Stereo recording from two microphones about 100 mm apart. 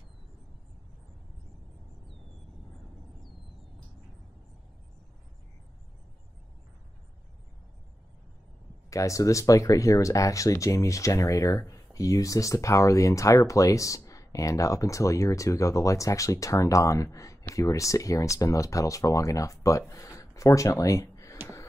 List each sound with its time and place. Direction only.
8.9 s speech: 30° left (ahead or behind)